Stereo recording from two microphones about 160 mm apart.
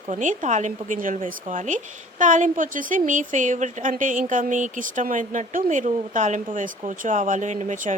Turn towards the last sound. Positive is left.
turn(degrees=-50)  # may be behind; listen again after turning